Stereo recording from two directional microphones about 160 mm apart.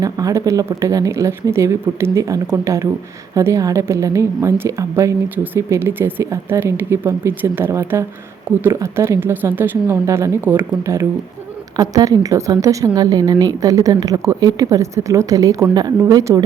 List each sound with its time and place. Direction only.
0.0 s a woman's voice: 20° right (ahead or behind)